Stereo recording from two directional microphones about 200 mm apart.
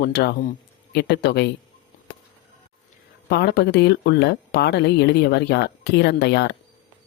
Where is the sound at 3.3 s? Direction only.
55° left (ahead or behind).